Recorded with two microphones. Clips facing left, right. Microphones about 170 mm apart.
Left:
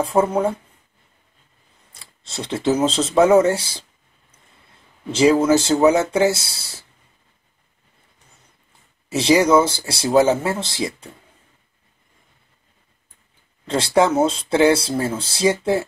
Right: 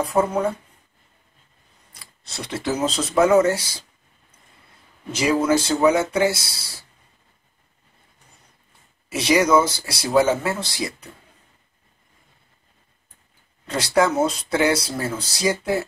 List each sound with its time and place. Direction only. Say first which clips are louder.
0.0 s speech: left 2 dB; 25° left (ahead or behind)
1.9 s a sound: left 1 dB; 25° left (ahead or behind)
2.5 s speech: left 5 dB; 20° left (ahead or behind)
5.1 s speech: left 5 dB; 30° left (ahead or behind)
9.1 s speech: left 3 dB; 30° left (ahead or behind)
13.7 s speech: left 3 dB; 25° left (ahead or behind)